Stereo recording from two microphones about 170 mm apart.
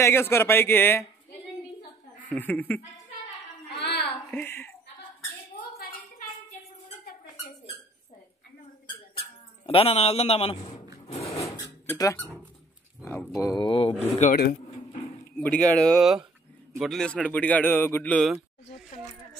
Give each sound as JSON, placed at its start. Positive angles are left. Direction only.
{"t": 0.0, "sound": "a man's voice", "side_deg": 15}
{"t": 2.2, "sound": "a man's voice", "side_deg": 10}
{"t": 3.7, "sound": "a sound", "side_deg": 75}
{"t": 4.3, "sound": "speech", "side_deg": 10}
{"t": 5.8, "sound": "a sound", "side_deg": 60}
{"t": 9.1, "sound": "dog", "side_deg": 35}
{"t": 11.1, "sound": "wood", "side_deg": 40}
{"t": 11.9, "sound": "speech", "side_deg": 15}
{"t": 14.1, "sound": "speech", "side_deg": 45}
{"t": 15.4, "sound": "a man's voice", "side_deg": 10}